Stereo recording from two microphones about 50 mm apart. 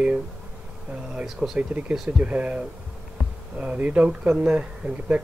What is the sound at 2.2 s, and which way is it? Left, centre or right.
Speech, right.